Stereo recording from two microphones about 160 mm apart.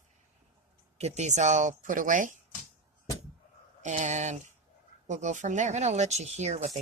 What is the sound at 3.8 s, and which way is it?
Speech, 50° right (ahead or behind).